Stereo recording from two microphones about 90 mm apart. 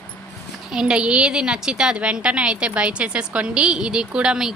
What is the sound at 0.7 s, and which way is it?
A woman's voice, 10° right (ahead or behind).